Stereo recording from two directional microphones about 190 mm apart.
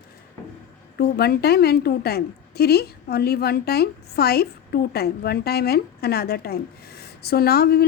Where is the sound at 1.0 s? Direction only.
55° left (ahead or behind).